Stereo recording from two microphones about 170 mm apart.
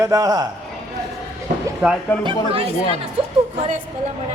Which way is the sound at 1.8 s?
15° right (ahead or behind).